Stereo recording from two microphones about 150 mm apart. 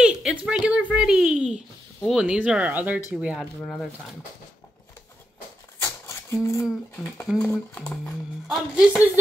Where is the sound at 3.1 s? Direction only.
5° right (ahead or behind).